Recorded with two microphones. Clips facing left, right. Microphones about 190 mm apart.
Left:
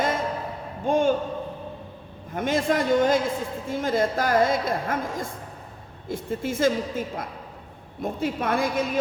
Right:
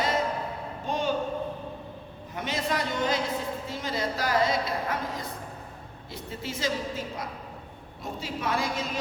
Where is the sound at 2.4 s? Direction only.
50° left (ahead or behind).